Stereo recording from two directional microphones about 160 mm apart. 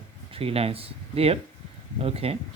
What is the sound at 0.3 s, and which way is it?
Speech, 40° right (ahead or behind).